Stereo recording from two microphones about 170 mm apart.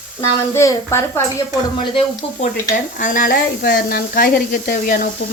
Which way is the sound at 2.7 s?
50° left (ahead or behind).